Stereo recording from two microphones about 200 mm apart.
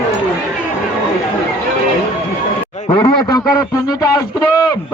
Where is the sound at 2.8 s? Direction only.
25° left (ahead or behind).